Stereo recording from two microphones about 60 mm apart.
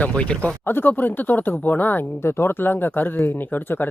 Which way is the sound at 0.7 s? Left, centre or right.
Left.